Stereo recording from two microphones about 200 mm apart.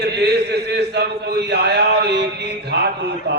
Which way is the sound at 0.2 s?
55° right (ahead or behind).